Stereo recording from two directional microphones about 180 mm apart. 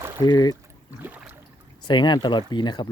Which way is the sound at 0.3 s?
20° left (ahead or behind).